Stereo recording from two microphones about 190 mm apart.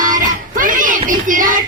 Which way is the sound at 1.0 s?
45° right (ahead or behind).